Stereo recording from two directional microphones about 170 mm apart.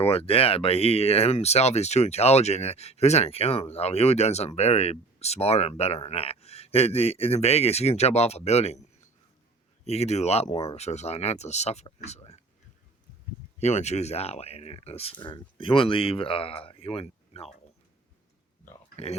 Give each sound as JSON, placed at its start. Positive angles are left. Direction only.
{"t": 0.0, "sound": "speech", "side_deg": 35}
{"t": 9.8, "sound": "speech", "side_deg": 40}
{"t": 13.6, "sound": "speech", "side_deg": 40}
{"t": 19.0, "sound": "speech", "side_deg": 35}